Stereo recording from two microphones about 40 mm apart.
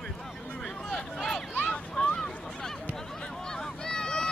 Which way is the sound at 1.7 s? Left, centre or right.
Left.